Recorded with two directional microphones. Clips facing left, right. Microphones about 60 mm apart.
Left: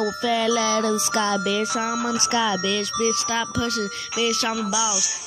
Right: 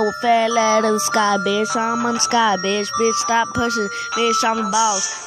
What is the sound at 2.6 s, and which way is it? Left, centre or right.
Music, right.